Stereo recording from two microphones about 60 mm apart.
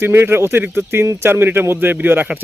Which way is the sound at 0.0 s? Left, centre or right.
Right.